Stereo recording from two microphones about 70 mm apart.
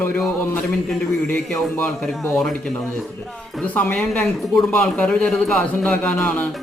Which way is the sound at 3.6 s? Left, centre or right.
Left.